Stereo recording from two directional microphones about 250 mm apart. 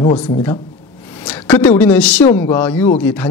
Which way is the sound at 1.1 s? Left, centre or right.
Centre.